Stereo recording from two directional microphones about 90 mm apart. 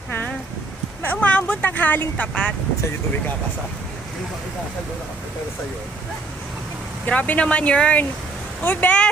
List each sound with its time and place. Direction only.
1.0 s speech: 15° left (ahead or behind)
7.0 s speech: 20° left (ahead or behind)